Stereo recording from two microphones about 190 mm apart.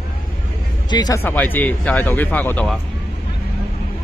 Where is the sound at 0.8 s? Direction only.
20° left (ahead or behind).